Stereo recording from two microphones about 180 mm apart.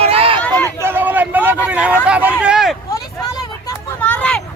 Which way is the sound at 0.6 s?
15° right (ahead or behind).